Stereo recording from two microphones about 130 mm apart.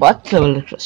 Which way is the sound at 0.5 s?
40° right (ahead or behind).